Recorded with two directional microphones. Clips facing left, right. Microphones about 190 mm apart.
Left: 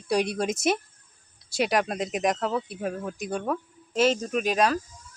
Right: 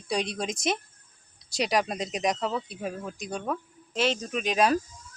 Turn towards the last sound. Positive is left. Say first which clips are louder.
# left 4 dB
turn(degrees=5)  # may be behind; listen again after turning